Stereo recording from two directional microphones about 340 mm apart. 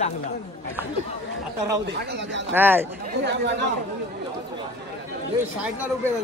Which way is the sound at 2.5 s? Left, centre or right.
Centre.